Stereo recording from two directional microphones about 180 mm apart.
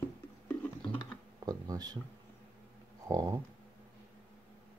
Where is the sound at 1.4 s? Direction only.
20° right (ahead or behind).